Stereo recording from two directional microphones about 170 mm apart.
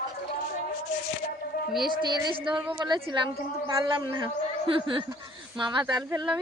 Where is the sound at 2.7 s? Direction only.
25° right (ahead or behind).